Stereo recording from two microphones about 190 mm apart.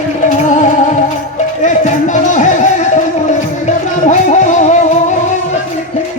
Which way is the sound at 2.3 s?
40° left (ahead or behind).